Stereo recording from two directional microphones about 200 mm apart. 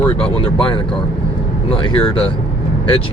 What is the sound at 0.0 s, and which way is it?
Speech, 5° left (ahead or behind).